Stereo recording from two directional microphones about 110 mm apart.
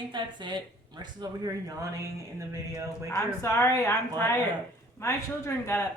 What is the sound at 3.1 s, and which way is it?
Speech, 30° left (ahead or behind).